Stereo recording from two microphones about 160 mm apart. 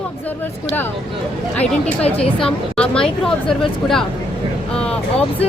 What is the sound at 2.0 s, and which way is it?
Speech, 40° left (ahead or behind).